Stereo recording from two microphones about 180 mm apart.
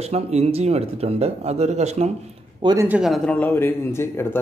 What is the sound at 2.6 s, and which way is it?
Speech, 25° right (ahead or behind).